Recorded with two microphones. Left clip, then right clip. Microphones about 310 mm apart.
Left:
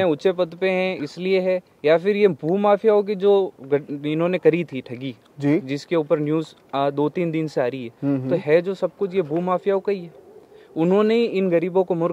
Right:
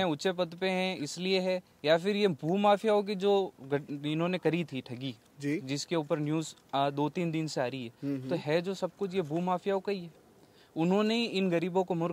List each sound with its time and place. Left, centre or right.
0.0 s a man's voice: right